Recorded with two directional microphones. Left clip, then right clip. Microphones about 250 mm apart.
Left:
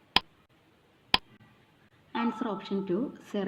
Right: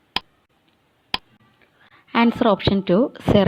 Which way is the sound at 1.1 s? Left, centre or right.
Centre.